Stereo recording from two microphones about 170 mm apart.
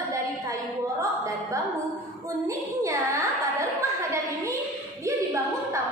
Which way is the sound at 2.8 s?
20° right (ahead or behind).